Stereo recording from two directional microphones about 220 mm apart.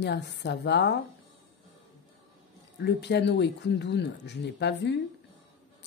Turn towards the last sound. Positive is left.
turn(degrees=50)  # may be behind; listen again after turning